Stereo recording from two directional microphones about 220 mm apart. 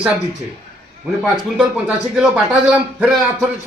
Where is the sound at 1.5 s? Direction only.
5° right (ahead or behind).